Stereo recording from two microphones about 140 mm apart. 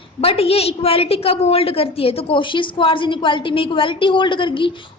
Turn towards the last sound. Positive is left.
turn(degrees=35)  # may be behind; listen again after turning